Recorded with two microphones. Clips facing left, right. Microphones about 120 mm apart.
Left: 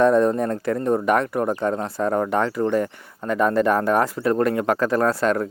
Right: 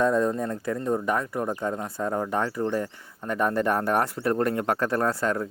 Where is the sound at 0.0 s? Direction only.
75° left (ahead or behind).